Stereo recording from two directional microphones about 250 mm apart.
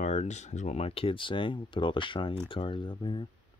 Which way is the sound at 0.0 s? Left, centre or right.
Left.